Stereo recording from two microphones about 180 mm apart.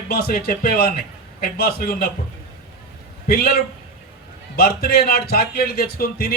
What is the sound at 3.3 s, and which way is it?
A man's voice, 60° left (ahead or behind).